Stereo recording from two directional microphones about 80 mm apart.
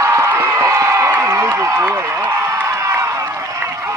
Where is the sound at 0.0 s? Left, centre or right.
Right.